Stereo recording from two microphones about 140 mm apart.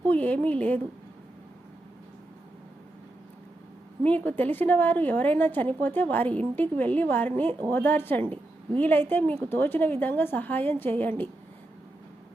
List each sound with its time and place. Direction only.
0.1 s a woman's voice: 10° left (ahead or behind)
4.0 s a woman's voice: 10° left (ahead or behind)
8.2 s a woman's voice: 40° right (ahead or behind)
8.8 s a woman's voice: 15° left (ahead or behind)